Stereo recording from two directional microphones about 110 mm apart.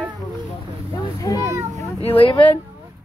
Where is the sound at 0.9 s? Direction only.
30° left (ahead or behind).